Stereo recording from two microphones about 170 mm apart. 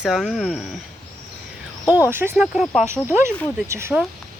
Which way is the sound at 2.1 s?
15° right (ahead or behind).